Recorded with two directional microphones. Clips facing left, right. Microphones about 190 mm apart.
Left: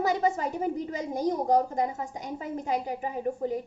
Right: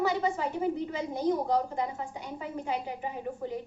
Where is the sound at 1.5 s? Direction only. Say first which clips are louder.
Left 4 dB; 40° left (ahead or behind).